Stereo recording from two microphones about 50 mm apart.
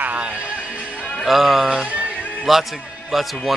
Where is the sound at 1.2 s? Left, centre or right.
Centre.